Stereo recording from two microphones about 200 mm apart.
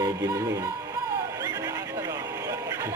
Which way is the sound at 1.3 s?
15° right (ahead or behind).